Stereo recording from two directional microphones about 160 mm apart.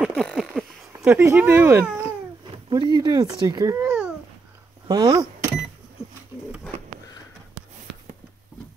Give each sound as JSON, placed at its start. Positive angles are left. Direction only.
{"t": 0.0, "sound": "a sound", "side_deg": 0}
{"t": 1.1, "sound": "speech", "side_deg": -10}
{"t": 2.7, "sound": "speech", "side_deg": -25}
{"t": 4.8, "sound": "speech", "side_deg": -25}